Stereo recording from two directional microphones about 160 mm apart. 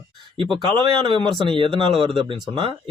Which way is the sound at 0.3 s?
30° right (ahead or behind).